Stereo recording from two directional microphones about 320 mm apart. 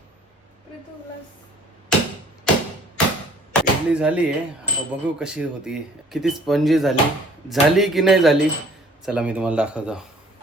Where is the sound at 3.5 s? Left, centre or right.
Centre.